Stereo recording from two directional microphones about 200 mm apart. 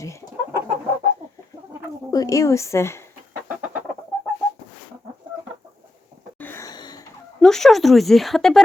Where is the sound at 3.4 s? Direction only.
5° right (ahead or behind).